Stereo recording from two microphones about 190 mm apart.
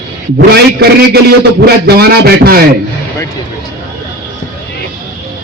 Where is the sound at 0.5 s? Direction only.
55° right (ahead or behind).